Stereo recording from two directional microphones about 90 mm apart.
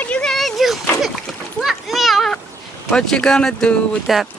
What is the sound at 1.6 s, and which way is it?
Children playing, centre (ahead or behind).